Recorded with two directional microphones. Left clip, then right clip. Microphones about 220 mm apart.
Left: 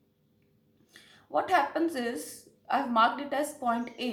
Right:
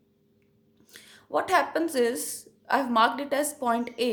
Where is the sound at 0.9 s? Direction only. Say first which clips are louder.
Right 2 dB; 45° right (ahead or behind).